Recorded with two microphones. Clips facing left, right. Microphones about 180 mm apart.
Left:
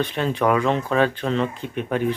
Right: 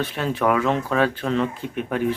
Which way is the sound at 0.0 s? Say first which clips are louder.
Left 1 dB; 5° right (ahead or behind).